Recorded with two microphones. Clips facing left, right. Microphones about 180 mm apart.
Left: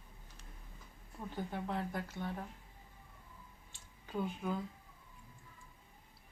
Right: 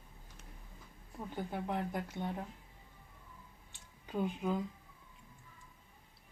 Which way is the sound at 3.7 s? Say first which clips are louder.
Right 2 dB; 20° right (ahead or behind).